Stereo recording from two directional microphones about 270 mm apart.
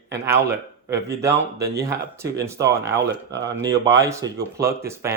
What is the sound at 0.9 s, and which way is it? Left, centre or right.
Speech, centre.